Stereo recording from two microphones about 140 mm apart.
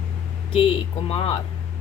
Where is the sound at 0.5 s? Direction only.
40° left (ahead or behind).